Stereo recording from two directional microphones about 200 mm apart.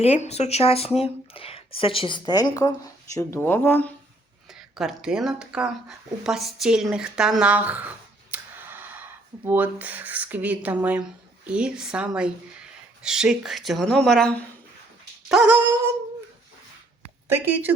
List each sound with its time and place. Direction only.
0.0 s speech: 30° left (ahead or behind); by 3.9 s 10° left (ahead or behind)
4.8 s speech: centre (ahead or behind)
15.3 s speech: 5° right (ahead or behind)
17.3 s speech: 10° right (ahead or behind)